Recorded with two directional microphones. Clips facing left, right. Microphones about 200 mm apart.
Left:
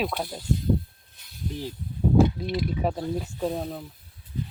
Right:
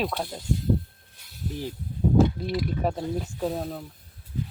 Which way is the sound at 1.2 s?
10° right (ahead or behind).